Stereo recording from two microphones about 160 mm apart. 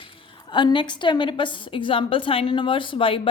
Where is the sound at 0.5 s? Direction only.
30° left (ahead or behind).